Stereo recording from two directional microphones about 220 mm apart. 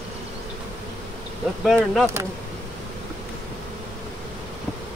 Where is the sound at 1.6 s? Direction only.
Centre (ahead or behind).